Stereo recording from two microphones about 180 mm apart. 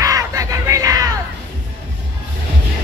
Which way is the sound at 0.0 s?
20° right (ahead or behind).